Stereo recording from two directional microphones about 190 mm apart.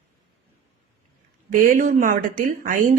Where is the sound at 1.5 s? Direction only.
45° right (ahead or behind).